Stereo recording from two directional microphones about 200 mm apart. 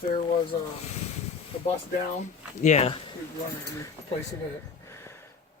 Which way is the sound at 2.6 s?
35° left (ahead or behind).